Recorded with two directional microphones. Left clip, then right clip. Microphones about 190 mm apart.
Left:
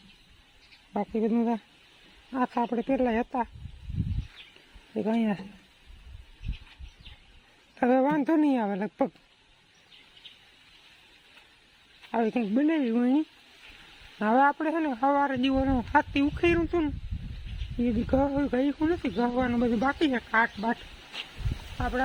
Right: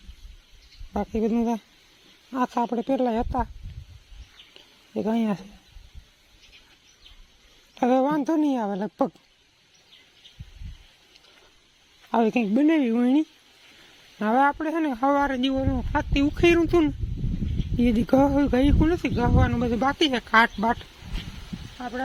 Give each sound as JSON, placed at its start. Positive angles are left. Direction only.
{"t": 0.9, "sound": "a woman's voice", "side_deg": -20}
{"t": 4.9, "sound": "speech", "side_deg": -10}
{"t": 7.8, "sound": "a woman's voice", "side_deg": -10}
{"t": 12.1, "sound": "speech", "side_deg": -25}
{"t": 14.5, "sound": "a woman's voice", "side_deg": -5}
{"t": 14.8, "sound": "speech", "side_deg": -20}
{"t": 15.5, "sound": "a woman's voice", "side_deg": 0}
{"t": 16.1, "sound": "speech", "side_deg": -15}
{"t": 21.8, "sound": "speech", "side_deg": 20}